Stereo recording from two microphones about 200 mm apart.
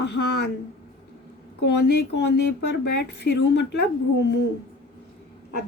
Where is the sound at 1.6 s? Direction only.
55° left (ahead or behind).